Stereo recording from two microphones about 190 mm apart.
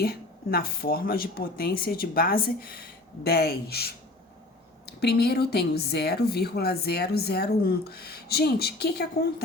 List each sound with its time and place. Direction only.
0.0 s a woman's voice: 50° left (ahead or behind)